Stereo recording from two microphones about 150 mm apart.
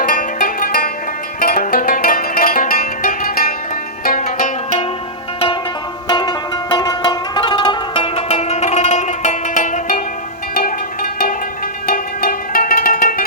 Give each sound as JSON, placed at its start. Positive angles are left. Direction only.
{"t": 0.0, "sound": "music", "side_deg": 65}
{"t": 4.0, "sound": "zither", "side_deg": 65}
{"t": 6.1, "sound": "music", "side_deg": 30}
{"t": 10.5, "sound": "music", "side_deg": 75}